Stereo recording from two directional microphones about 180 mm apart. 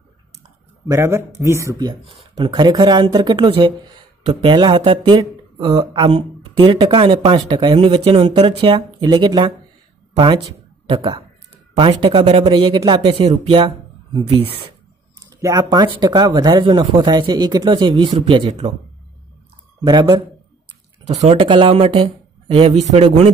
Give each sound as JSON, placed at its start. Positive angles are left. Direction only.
{"t": 0.8, "sound": "speech", "side_deg": -15}
{"t": 15.1, "sound": "speech", "side_deg": -20}
{"t": 19.8, "sound": "speech", "side_deg": -20}
{"t": 21.3, "sound": "speech", "side_deg": -30}